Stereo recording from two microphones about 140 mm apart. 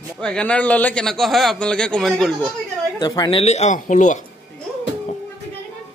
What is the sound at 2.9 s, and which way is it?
Speech, 30° left (ahead or behind).